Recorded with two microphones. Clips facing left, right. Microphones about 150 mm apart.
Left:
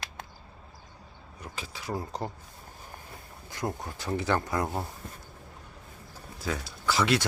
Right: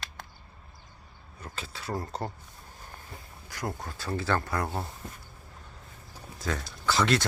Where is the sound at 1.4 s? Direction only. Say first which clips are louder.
Even; 10° left (ahead or behind).